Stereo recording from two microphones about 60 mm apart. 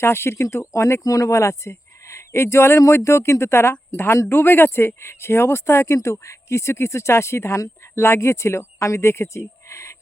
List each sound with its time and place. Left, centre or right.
0.0 s speech: left
1.0 s speech: left